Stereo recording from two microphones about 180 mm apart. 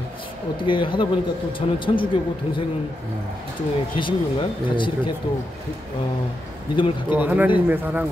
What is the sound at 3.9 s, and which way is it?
Speech, 30° left (ahead or behind).